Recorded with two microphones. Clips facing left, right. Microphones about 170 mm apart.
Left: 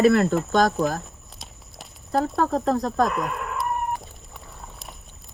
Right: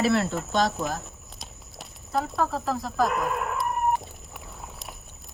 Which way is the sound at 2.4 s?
35° left (ahead or behind).